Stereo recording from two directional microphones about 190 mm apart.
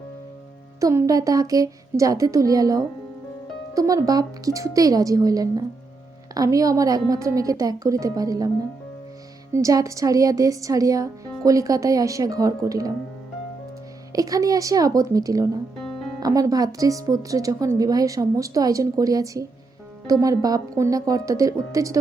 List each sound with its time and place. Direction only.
0.8 s speech: 15° right (ahead or behind)
9.5 s speech: 15° right (ahead or behind)
14.1 s speech: 20° right (ahead or behind)
15.8 s music: 5° left (ahead or behind)
16.2 s speech: 20° right (ahead or behind)